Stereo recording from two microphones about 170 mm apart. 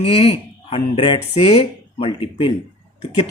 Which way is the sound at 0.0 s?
35° left (ahead or behind).